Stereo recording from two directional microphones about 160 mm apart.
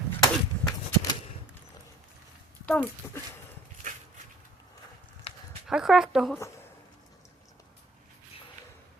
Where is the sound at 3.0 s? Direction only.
15° left (ahead or behind).